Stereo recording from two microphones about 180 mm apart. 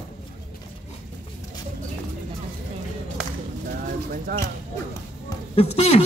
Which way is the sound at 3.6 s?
50° right (ahead or behind).